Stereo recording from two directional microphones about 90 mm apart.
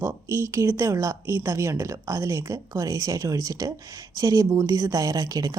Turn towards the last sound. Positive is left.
turn(degrees=-40)  # may be behind; listen again after turning